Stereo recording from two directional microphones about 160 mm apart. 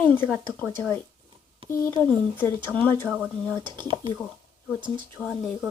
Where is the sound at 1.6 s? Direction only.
35° right (ahead or behind).